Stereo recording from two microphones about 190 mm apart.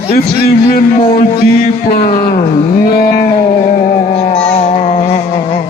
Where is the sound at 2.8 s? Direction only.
50° left (ahead or behind).